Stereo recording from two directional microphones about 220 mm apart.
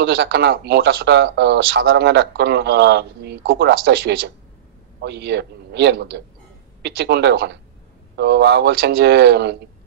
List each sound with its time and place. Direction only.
0.0 s speech: 50° right (ahead or behind)